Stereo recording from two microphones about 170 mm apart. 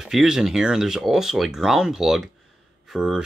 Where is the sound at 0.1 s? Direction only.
5° right (ahead or behind).